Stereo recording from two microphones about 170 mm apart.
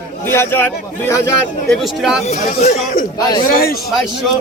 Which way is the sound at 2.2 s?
45° left (ahead or behind).